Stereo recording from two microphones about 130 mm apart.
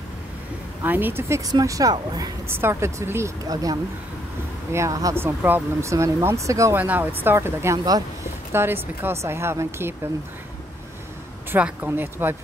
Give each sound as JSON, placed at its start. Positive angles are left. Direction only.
{"t": 0.8, "sound": "speech", "side_deg": -15}
{"t": 2.4, "sound": "speech", "side_deg": -20}
{"t": 4.7, "sound": "speech", "side_deg": -25}
{"t": 5.2, "sound": "speech", "side_deg": -15}
{"t": 6.8, "sound": "speech", "side_deg": -15}
{"t": 8.5, "sound": "speech", "side_deg": -15}
{"t": 11.5, "sound": "speech", "side_deg": -15}